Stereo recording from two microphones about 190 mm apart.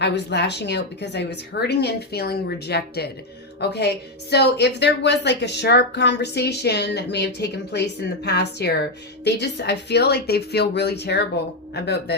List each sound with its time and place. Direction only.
0.0 s a woman's voice: 65° left (ahead or behind)